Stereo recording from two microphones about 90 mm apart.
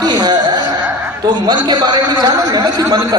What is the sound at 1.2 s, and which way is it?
A man's voice, 50° right (ahead or behind).